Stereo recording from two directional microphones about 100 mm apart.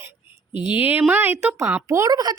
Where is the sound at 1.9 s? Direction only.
35° right (ahead or behind).